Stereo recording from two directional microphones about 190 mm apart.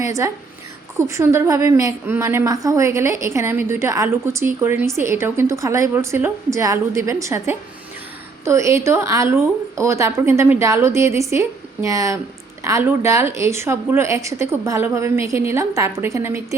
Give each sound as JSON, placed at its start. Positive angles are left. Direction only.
{"t": 0.0, "sound": "a woman's voice", "side_deg": -15}